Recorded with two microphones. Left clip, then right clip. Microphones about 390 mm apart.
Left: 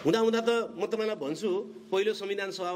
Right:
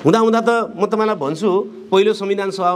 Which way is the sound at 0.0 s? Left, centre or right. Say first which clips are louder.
Right 12 dB; right.